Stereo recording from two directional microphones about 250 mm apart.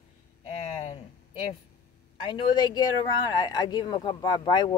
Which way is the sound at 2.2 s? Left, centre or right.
Centre.